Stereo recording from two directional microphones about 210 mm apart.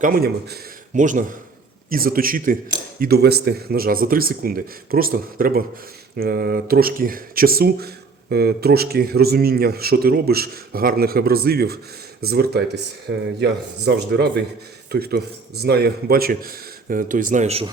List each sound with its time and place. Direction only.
0.0 s a man's voice: 45° right (ahead or behind); by 17.7 s 30° right (ahead or behind)